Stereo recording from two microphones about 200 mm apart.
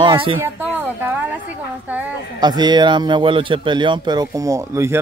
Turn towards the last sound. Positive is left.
turn(degrees=-15)  # may be behind; listen again after turning